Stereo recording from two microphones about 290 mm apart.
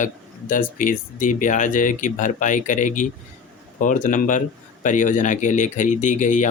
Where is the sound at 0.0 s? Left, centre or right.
Left.